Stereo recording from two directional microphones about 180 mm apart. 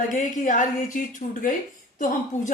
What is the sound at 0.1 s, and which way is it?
A woman's voice, 45° left (ahead or behind).